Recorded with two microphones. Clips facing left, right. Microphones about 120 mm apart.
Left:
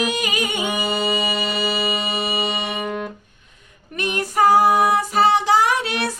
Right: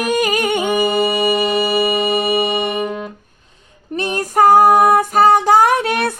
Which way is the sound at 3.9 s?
35° right (ahead or behind).